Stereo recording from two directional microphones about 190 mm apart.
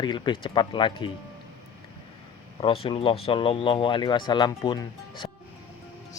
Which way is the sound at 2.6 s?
30° left (ahead or behind).